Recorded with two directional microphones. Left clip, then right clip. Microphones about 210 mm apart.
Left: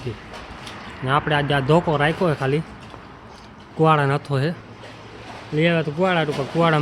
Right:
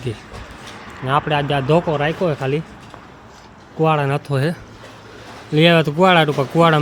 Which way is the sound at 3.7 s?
5° left (ahead or behind).